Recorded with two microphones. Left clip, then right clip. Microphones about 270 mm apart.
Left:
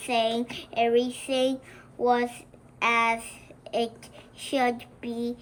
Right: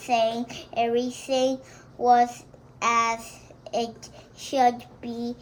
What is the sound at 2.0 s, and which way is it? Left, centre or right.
Speech, left.